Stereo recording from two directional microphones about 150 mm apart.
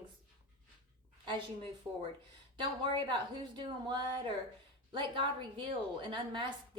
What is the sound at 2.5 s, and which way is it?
A woman's voice, 30° right (ahead or behind).